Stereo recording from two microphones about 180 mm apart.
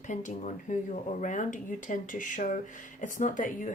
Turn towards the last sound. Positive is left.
turn(degrees=45)  # may be behind; listen again after turning